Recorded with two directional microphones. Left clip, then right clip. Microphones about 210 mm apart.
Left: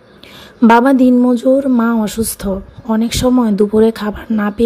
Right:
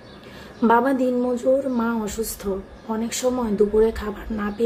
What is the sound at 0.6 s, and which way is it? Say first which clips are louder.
Speech: left 9 dB; 40° left (ahead or behind).